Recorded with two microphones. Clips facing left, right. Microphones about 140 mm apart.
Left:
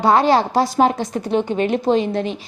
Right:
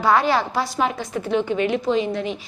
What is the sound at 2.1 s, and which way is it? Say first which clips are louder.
Speech: left 3 dB; 30° left (ahead or behind).